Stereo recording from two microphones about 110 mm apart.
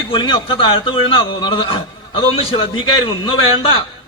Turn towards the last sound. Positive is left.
turn(degrees=50)  # may be behind; listen again after turning